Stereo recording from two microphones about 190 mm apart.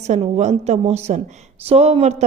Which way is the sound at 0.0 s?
35° right (ahead or behind).